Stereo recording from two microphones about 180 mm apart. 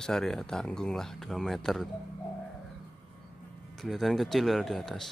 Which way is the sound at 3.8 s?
Centre (ahead or behind).